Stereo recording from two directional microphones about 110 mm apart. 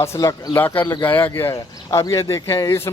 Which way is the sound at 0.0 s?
25° left (ahead or behind).